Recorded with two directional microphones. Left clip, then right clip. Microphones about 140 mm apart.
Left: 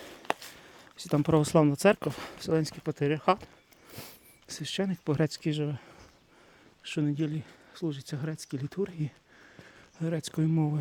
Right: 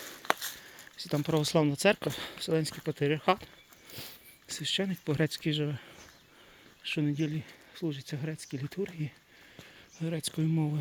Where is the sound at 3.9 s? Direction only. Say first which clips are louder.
Right 1 dB; 40° left (ahead or behind); by 7.5 s 20° left (ahead or behind).